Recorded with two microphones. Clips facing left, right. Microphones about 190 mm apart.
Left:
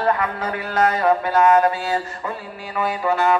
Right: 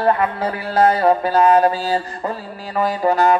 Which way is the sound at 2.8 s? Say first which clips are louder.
Right 4 dB; 40° right (ahead or behind).